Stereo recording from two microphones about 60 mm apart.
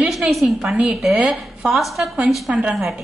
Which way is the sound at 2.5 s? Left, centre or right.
Right.